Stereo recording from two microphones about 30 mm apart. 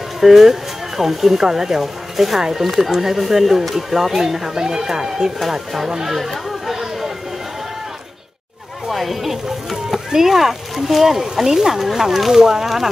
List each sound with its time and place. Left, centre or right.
0.2 s speech: centre
5.5 s speech: centre
5.9 s speech: centre
6.1 s chatter: centre
8.8 s a sound: centre
9.9 s speech: centre